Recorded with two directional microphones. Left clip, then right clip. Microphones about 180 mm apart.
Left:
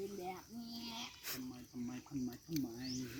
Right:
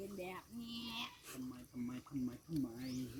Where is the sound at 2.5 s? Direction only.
5° left (ahead or behind).